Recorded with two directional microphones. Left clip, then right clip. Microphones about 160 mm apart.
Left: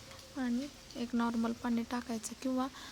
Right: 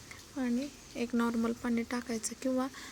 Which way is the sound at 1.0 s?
10° right (ahead or behind).